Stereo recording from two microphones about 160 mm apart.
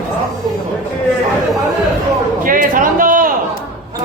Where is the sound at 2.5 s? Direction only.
60° right (ahead or behind).